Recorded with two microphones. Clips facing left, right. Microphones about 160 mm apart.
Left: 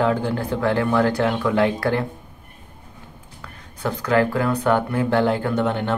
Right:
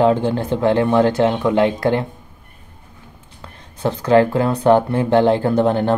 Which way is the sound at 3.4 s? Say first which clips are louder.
Right 7 dB; 25° right (ahead or behind).